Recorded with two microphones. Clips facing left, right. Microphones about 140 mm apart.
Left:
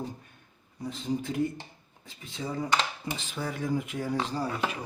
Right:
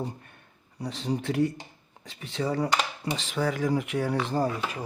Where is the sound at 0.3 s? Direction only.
70° right (ahead or behind).